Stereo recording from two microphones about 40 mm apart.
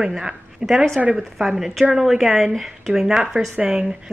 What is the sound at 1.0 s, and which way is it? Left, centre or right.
Speech, right.